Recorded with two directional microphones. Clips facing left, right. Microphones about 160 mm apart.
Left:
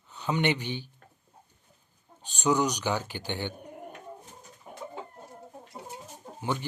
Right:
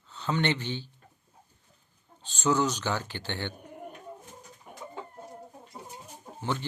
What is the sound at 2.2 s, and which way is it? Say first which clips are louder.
Speech: left 1 dB; 15° left (ahead or behind).